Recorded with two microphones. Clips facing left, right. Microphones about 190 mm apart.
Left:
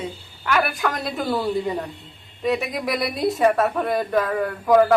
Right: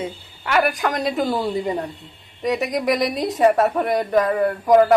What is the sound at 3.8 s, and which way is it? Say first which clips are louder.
Speech: right 3 dB; 15° right (ahead or behind).